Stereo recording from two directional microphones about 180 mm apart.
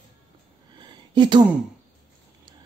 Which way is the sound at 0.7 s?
25° right (ahead or behind).